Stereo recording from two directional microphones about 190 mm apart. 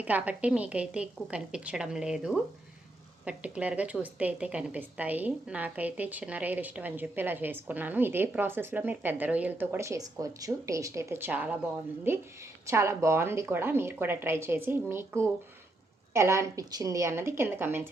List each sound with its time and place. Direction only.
0.0 s a woman's voice: 10° right (ahead or behind)